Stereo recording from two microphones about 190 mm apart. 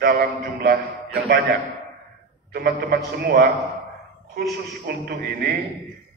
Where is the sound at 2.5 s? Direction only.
55° right (ahead or behind).